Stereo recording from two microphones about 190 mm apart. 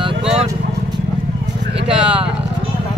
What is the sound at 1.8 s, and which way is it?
Speech, 30° right (ahead or behind).